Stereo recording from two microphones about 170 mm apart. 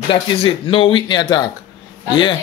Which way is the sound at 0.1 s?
35° left (ahead or behind).